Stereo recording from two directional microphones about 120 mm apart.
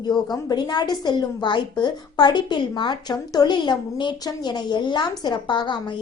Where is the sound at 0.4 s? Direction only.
35° left (ahead or behind).